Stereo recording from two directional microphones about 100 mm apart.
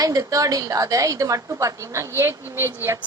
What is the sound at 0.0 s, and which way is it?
A woman's voice, 35° right (ahead or behind).